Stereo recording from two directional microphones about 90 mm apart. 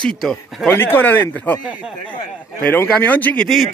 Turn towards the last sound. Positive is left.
turn(degrees=15)  # may be behind; listen again after turning